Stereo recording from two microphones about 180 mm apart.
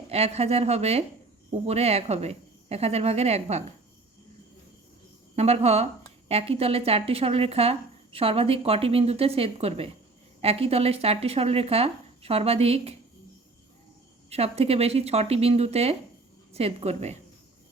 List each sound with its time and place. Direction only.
0.1 s a woman's voice: 35° right (ahead or behind)
5.4 s a woman's voice: 35° right (ahead or behind)
14.3 s a woman's voice: 35° right (ahead or behind)